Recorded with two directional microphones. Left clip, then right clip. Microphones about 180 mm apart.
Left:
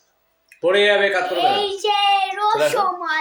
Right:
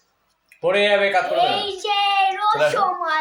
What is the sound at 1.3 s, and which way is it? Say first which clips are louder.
Child singing: left 1 dB; 30° left (ahead or behind).